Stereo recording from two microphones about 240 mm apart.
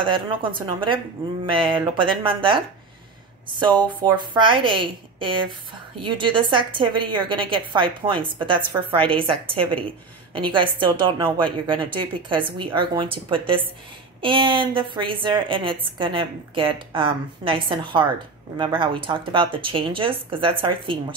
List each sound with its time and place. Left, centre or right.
0.0 s a woman's voice: centre